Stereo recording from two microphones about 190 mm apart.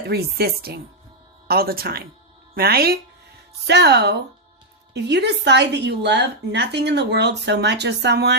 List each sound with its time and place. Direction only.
0.1 s a woman's voice: 55° right (ahead or behind)